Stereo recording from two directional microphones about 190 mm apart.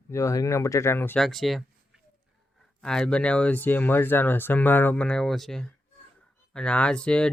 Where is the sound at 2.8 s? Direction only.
5° left (ahead or behind).